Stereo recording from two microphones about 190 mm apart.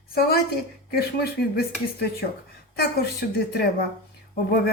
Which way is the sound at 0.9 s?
55° left (ahead or behind).